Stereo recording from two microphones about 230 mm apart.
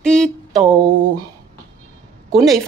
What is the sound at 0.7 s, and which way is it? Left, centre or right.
Speech, centre.